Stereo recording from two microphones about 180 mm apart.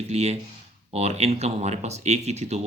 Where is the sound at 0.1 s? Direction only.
35° right (ahead or behind).